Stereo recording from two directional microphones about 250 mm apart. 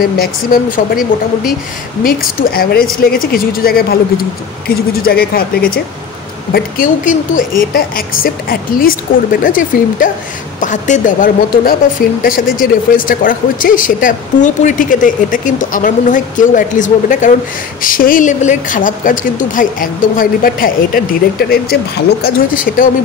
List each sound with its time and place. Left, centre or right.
0.0 s speech: left